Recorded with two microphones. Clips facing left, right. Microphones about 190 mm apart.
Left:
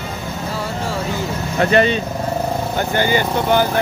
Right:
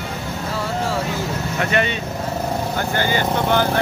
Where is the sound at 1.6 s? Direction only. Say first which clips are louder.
Left 7 dB; 35° left (ahead or behind).